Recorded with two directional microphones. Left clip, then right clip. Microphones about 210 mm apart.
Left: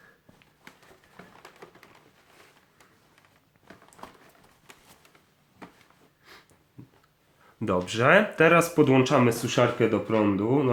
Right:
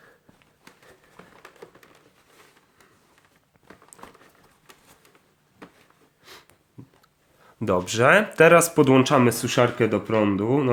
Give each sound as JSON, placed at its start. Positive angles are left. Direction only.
{"t": 4.0, "sound": "run", "side_deg": -5}
{"t": 6.3, "sound": "sniff", "side_deg": -40}
{"t": 7.6, "sound": "speech", "side_deg": -40}